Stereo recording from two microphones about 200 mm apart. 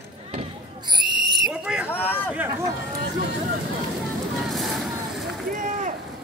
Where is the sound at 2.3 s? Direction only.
10° right (ahead or behind).